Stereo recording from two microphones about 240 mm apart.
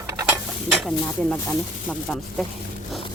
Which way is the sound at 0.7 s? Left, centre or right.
Centre.